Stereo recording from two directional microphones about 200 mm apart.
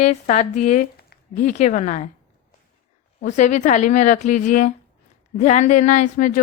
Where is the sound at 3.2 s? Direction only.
35° left (ahead or behind).